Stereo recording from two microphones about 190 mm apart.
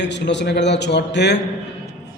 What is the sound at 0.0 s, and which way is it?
A man's voice, 65° left (ahead or behind).